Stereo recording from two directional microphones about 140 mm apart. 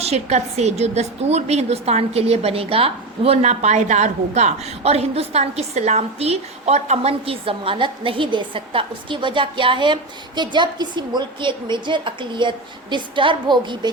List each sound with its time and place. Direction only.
0.0 s a woman's voice: 50° right (ahead or behind); by 13.9 s 35° right (ahead or behind)